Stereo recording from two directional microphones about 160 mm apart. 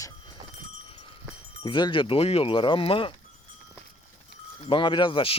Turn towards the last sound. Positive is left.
turn(degrees=30)  # may be behind; listen again after turning